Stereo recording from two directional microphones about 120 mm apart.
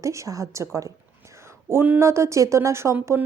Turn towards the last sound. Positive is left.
turn(degrees=-25)  # may be behind; listen again after turning